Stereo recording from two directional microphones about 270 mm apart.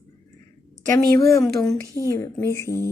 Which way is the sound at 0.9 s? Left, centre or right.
Centre.